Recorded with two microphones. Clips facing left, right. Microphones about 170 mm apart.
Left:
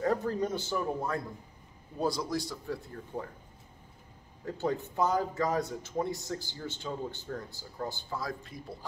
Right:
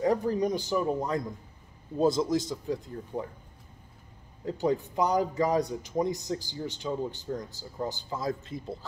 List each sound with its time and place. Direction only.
0.0 s a man's voice: 15° right (ahead or behind)
4.5 s a man's voice: 15° right (ahead or behind)